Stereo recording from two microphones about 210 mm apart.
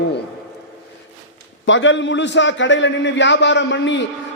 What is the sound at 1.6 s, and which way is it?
A man's voice, 65° left (ahead or behind).